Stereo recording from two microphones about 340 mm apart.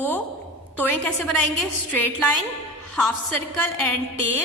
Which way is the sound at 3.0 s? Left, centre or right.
Right.